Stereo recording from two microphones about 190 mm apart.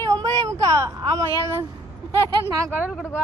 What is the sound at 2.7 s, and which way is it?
Speech, 5° right (ahead or behind).